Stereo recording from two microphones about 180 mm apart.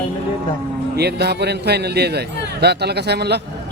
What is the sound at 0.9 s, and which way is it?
Speech, 65° right (ahead or behind).